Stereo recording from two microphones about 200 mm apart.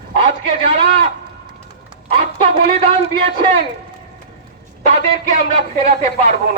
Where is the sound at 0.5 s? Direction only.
30° right (ahead or behind).